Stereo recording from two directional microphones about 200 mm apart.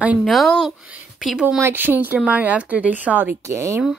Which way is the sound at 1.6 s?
10° right (ahead or behind).